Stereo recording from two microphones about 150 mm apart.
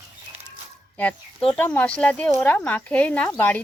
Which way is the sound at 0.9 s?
10° left (ahead or behind).